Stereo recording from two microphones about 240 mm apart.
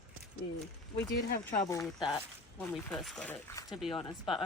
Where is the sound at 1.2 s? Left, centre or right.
Left.